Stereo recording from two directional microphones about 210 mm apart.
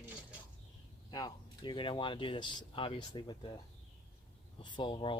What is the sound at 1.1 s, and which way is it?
Speech, 20° left (ahead or behind).